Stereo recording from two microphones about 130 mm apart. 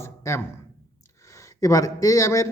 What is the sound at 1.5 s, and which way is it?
Speech, 25° left (ahead or behind).